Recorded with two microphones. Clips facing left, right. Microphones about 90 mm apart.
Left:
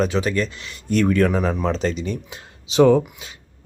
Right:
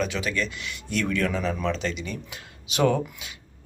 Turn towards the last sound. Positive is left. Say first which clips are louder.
# left 8 dB
turn(degrees=30)  # may be behind; listen again after turning